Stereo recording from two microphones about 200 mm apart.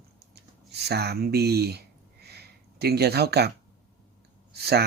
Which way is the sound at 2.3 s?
55° right (ahead or behind).